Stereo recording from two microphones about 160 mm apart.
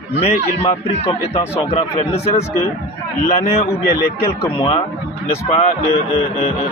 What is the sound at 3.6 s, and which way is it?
Speech, 80° left.